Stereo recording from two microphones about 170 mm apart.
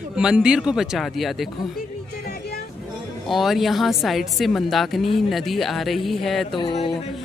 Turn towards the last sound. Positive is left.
turn(degrees=30)  # may be behind; listen again after turning